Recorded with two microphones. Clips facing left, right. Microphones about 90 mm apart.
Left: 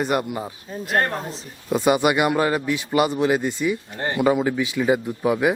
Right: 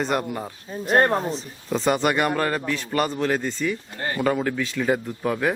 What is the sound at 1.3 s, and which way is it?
A man's voice, centre (ahead or behind).